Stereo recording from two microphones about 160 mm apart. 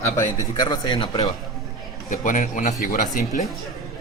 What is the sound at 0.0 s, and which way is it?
Speech, 25° left (ahead or behind).